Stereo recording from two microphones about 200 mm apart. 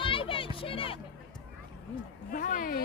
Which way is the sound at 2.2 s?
45° left (ahead or behind).